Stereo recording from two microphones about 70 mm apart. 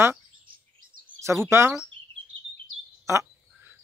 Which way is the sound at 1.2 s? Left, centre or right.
Right.